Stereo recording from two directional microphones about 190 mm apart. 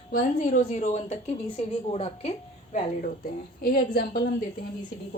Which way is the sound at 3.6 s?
55° left (ahead or behind).